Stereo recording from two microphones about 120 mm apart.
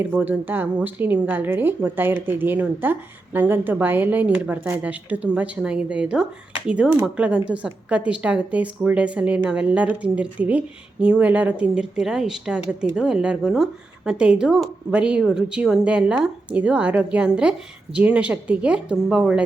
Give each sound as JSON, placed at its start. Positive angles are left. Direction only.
{"t": 0.0, "sound": "speech", "side_deg": -15}